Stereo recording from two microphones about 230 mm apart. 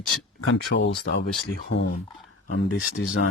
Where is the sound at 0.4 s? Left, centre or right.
Left.